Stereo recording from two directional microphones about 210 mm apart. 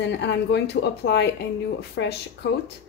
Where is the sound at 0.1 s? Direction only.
55° left (ahead or behind).